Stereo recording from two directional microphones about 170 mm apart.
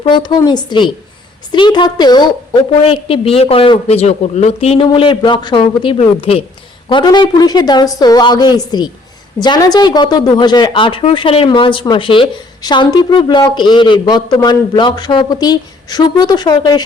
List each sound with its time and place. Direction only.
0.0 s a woman's voice: 25° left (ahead or behind)